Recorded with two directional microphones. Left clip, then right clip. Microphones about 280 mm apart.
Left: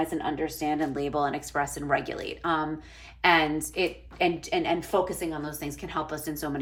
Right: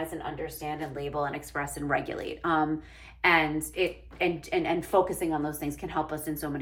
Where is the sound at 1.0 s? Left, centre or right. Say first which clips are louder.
Left 3 dB; centre.